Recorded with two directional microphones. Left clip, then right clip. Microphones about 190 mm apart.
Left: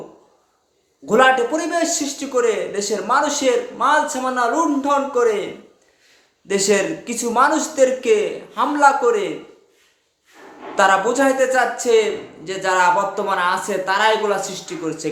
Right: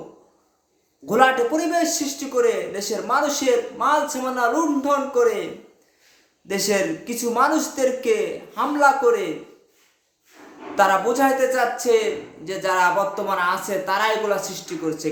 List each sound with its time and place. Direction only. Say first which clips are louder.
1.0 s a man's voice: left 3 dB; 5° left (ahead or behind)
6.5 s a man's voice: left 4 dB; 5° left (ahead or behind)
10.8 s a man's voice: left 2 dB; 5° left (ahead or behind)